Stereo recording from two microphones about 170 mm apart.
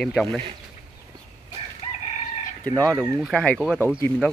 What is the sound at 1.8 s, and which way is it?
Chicken, 35° left (ahead or behind).